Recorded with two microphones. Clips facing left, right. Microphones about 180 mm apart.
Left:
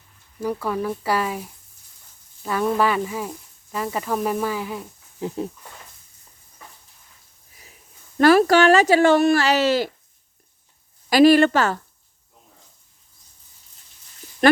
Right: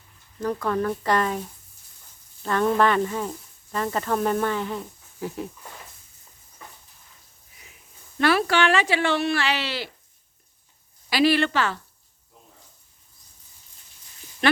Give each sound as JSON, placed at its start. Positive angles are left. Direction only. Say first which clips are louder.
{"t": 0.3, "sound": "speech", "louder": "even", "side_deg": 10}
{"t": 8.2, "sound": "speech", "louder": "left 7 dB", "side_deg": 40}
{"t": 11.1, "sound": "speech", "louder": "left 7 dB", "side_deg": 45}
{"t": 14.4, "sound": "a sound", "louder": "left 6 dB", "side_deg": 45}